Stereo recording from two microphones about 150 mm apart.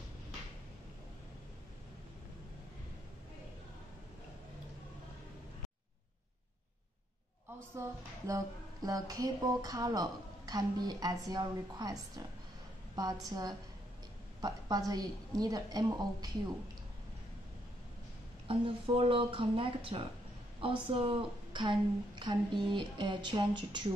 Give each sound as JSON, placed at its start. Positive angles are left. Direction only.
{"t": 8.8, "sound": "speech", "side_deg": -25}
{"t": 18.5, "sound": "a woman's voice", "side_deg": -40}